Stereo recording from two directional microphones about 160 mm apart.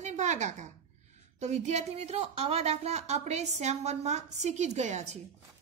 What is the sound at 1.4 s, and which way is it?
Speech, 45° right (ahead or behind).